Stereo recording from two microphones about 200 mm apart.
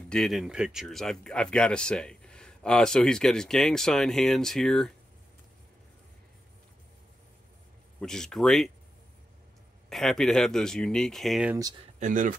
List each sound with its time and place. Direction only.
0.1 s speech: centre (ahead or behind)
8.0 s speech: 5° left (ahead or behind)
9.8 s speech: centre (ahead or behind)
12.0 s speech: 40° right (ahead or behind)